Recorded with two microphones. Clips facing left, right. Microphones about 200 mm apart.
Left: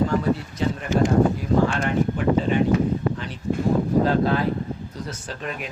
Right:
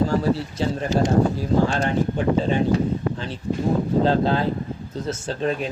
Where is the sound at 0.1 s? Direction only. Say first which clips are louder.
Right 1 dB; 30° right (ahead or behind).